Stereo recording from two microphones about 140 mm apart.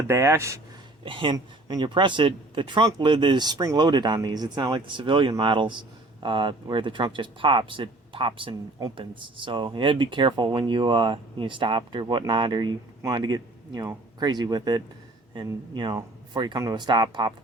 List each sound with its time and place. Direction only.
0.1 s speech: 20° right (ahead or behind)
1.0 s speech: 35° right (ahead or behind)